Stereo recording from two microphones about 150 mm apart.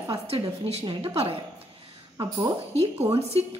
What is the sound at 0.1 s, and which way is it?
A woman's voice, 45° right (ahead or behind).